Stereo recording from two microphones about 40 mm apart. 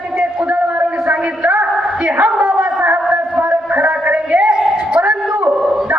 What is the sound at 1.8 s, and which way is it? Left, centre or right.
Dog, right.